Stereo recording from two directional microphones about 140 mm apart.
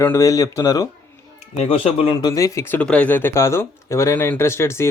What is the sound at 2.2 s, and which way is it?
Speech, 25° left (ahead or behind).